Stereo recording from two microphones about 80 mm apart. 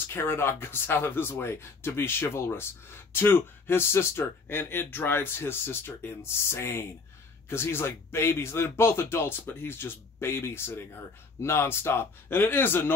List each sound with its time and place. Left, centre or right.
0.0 s speech: left